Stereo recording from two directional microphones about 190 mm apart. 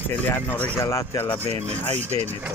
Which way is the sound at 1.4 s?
35° right (ahead or behind).